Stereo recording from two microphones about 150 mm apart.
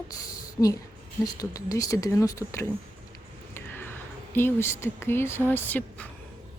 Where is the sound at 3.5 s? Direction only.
15° left (ahead or behind).